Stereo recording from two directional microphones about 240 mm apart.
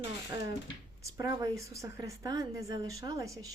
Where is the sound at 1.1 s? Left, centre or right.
Centre.